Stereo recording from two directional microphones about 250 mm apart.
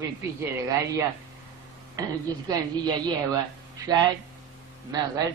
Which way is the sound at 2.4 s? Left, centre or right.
Centre.